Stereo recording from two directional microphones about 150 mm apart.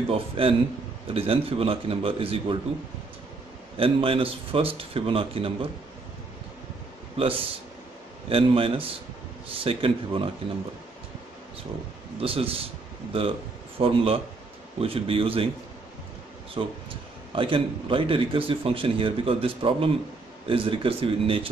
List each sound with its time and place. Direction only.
0.1 s speech: 40° right (ahead or behind)
3.7 s speech: 40° right (ahead or behind)
7.2 s speech: 40° right (ahead or behind)
12.2 s speech: 40° right (ahead or behind)
16.6 s speech: 35° right (ahead or behind)